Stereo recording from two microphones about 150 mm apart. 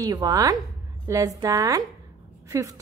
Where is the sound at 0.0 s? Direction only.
25° right (ahead or behind).